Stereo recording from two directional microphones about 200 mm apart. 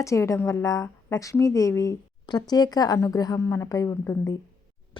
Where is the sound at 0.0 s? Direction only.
15° left (ahead or behind).